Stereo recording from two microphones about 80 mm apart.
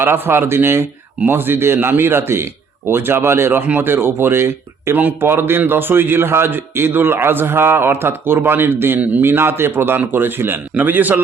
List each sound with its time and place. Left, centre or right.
0.0 s a man's voice: right